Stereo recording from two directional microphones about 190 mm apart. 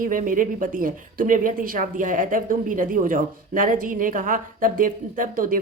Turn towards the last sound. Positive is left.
turn(degrees=-45)  # may be behind; listen again after turning